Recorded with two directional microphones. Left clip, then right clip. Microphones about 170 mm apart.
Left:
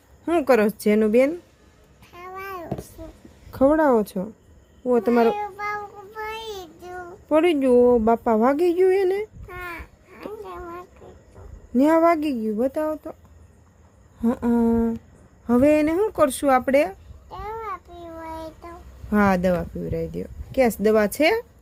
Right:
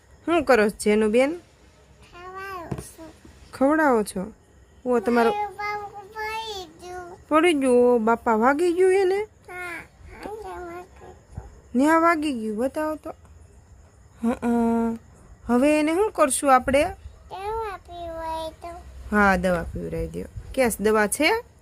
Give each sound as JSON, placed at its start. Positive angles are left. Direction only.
{"t": 0.3, "sound": "speech", "side_deg": 0}
{"t": 2.3, "sound": "babbling", "side_deg": 10}
{"t": 3.5, "sound": "speech", "side_deg": 0}
{"t": 4.9, "sound": "child singing", "side_deg": 0}
{"t": 11.7, "sound": "speech", "side_deg": 0}
{"t": 14.2, "sound": "speech", "side_deg": 0}
{"t": 17.2, "sound": "babbling", "side_deg": -10}
{"t": 18.2, "sound": "child singing", "side_deg": -5}
{"t": 19.1, "sound": "speech", "side_deg": 5}